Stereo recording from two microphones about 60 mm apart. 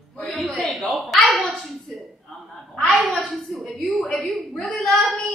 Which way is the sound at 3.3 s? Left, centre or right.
Centre.